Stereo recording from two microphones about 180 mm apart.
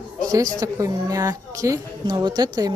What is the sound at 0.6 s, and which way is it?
A woman's voice, 20° right (ahead or behind).